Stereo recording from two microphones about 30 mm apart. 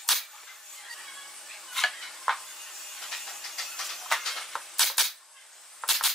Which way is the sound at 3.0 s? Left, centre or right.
Centre.